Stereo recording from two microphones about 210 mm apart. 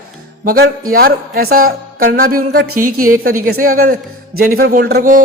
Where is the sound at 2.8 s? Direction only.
90° right.